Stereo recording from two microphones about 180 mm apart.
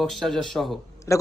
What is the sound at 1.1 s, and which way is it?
Speech, 15° left (ahead or behind).